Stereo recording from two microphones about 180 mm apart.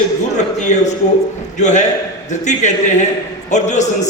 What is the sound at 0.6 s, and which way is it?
A man's voice, 40° left (ahead or behind).